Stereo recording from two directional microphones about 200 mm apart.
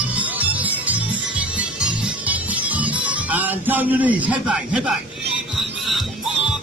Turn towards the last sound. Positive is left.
turn(degrees=-5)  # may be behind; listen again after turning